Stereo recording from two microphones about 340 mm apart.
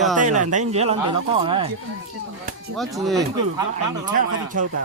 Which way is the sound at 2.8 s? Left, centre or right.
Centre.